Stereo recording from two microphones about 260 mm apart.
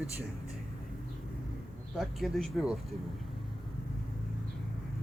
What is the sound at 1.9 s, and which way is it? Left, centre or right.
Speech, centre.